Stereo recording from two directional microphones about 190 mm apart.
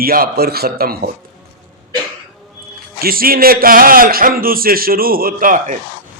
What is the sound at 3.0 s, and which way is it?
A man's voice, 50° right (ahead or behind).